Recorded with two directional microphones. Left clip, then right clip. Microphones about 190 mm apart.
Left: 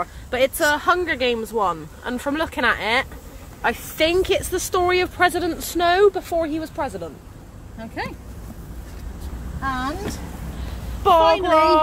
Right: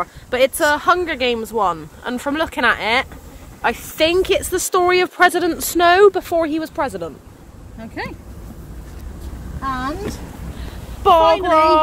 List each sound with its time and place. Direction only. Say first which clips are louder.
0.0 s speech: right 4 dB; 20° right (ahead or behind); by 7.1 s 45° right (ahead or behind)
7.8 s speech: right 1 dB; centre (ahead or behind)
9.6 s speech: right 2 dB; 5° left (ahead or behind)
11.3 s speech: right 2 dB; 15° left (ahead or behind)